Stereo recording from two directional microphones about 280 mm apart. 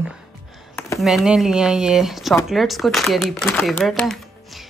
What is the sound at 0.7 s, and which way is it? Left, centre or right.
Speech, centre.